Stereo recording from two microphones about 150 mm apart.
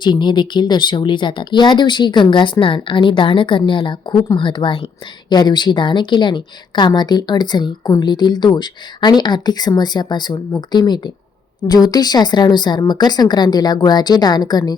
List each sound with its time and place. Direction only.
0.0 s a woman's voice: 30° left (ahead or behind)